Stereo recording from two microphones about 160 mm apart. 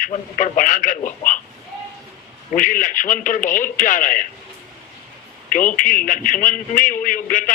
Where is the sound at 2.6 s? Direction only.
55° left (ahead or behind).